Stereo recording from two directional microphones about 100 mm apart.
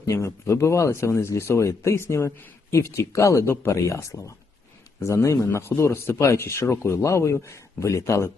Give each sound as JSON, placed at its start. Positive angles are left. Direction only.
{"t": 0.0, "sound": "speech", "side_deg": 30}